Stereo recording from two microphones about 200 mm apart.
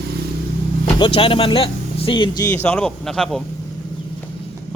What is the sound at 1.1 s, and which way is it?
Speech, 25° left (ahead or behind).